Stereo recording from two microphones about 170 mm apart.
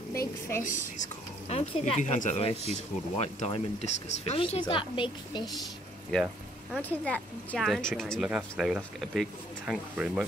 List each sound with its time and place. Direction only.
0.1 s a woman's voice: 15° left (ahead or behind)
0.9 s speech: 40° left (ahead or behind)
6.8 s speech: 10° left (ahead or behind)